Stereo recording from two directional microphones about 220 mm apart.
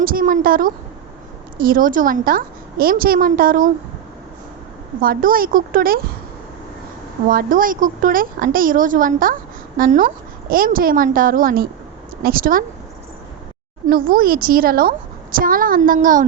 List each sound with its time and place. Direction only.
0.0 s a woman's voice: 40° right (ahead or behind)
4.9 s a woman's voice: 40° right (ahead or behind)
7.3 s a woman's voice: 40° right (ahead or behind)
13.8 s a woman's voice: 40° right (ahead or behind)